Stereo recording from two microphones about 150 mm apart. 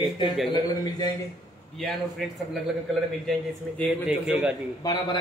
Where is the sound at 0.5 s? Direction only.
25° left (ahead or behind).